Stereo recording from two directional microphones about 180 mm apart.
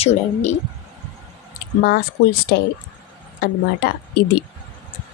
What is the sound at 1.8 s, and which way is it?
Speech, 60° left (ahead or behind).